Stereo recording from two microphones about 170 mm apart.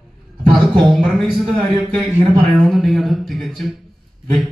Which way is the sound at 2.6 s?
Centre (ahead or behind).